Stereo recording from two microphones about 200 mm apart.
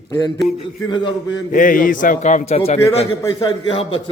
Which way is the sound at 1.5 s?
40° left (ahead or behind).